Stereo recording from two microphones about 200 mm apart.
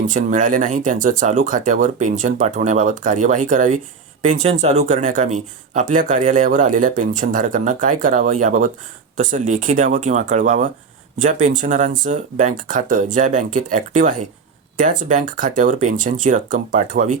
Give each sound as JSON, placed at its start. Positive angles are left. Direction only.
{"t": 0.0, "sound": "speech", "side_deg": -40}